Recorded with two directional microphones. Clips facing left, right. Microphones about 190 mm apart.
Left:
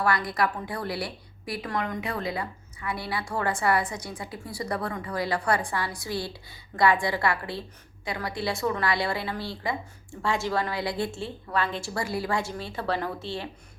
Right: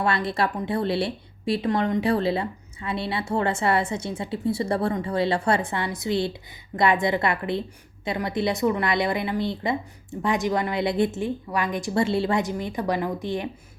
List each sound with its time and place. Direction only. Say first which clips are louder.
0.0 s a woman's voice: right 2 dB; 25° right (ahead or behind)